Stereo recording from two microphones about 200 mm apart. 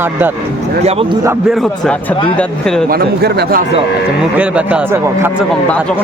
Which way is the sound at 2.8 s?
50° right (ahead or behind).